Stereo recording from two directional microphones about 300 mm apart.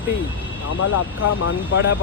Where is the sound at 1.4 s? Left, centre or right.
Left.